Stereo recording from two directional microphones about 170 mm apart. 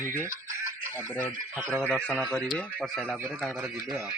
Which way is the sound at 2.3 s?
5° left (ahead or behind).